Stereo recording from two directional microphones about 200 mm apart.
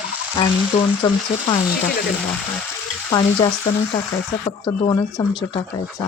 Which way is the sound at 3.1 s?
20° left (ahead or behind).